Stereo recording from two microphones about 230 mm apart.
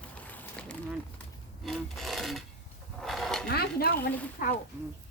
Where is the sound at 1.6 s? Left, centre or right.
Centre.